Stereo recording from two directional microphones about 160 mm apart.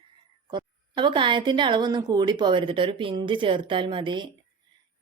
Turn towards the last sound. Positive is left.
turn(degrees=-30)  # may be behind; listen again after turning